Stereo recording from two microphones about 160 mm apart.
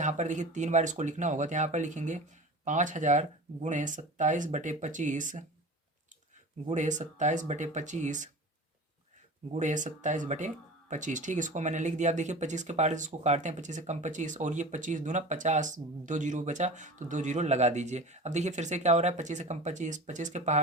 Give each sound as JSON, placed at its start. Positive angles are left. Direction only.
{"t": 0.0, "sound": "speech", "side_deg": -50}
{"t": 6.7, "sound": "speech", "side_deg": -50}
{"t": 9.5, "sound": "speech", "side_deg": -50}